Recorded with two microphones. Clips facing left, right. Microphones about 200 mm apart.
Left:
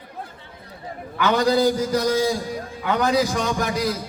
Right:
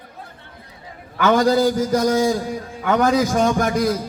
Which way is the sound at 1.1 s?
45° right (ahead or behind).